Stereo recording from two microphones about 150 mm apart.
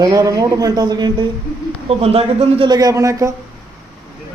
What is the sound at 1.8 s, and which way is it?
Speech, 40° right (ahead or behind).